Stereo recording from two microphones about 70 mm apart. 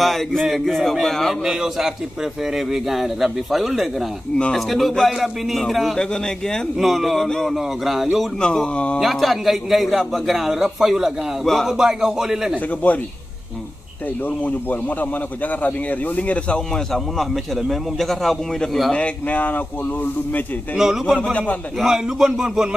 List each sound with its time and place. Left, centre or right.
0.0 s a man's voice: centre
1.4 s a man's voice: centre
6.8 s a man's voice: centre
7.5 s a man's voice: centre
8.4 s a man's voice: centre
9.0 s a man's voice: centre
12.6 s speech: left
14.2 s a man's voice: left; by 18.9 s centre
18.9 s speech: left
20.7 s a man's voice: centre